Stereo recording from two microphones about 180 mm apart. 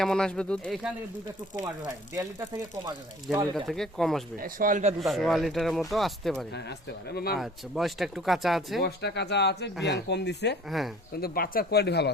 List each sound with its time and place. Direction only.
0.0 s speech: 5° left (ahead or behind)
2.1 s speech: 20° right (ahead or behind)
3.3 s speech: centre (ahead or behind)
4.4 s speech: 50° right (ahead or behind)
4.9 s speech: centre (ahead or behind)
6.5 s speech: 70° left (ahead or behind)
7.3 s speech: centre (ahead or behind)
8.8 s speech: 65° left (ahead or behind)
10.7 s speech: centre (ahead or behind)
11.2 s speech: 55° left (ahead or behind)